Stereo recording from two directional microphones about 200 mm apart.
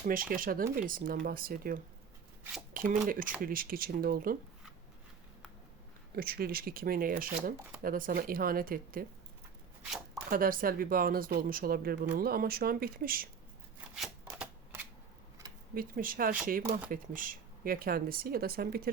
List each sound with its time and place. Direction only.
0.0 s speech: 45° right (ahead or behind)
6.1 s speech: 50° right (ahead or behind)
10.2 s speech: 45° right (ahead or behind)
13.9 s shuffling cards: 5° right (ahead or behind)
15.7 s speech: 45° right (ahead or behind)